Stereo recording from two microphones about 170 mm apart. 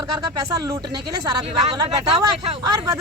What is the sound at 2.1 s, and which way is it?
Speech, 35° right (ahead or behind).